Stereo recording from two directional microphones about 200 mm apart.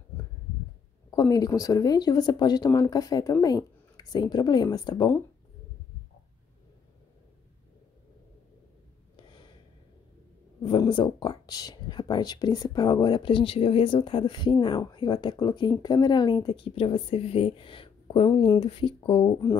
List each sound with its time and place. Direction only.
1.1 s speech: 20° left (ahead or behind)
9.1 s a sound: 25° left (ahead or behind)
10.6 s speech: 25° left (ahead or behind)